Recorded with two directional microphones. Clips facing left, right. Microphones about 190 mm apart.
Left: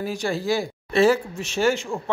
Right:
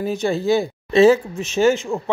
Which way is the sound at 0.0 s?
20° right (ahead or behind).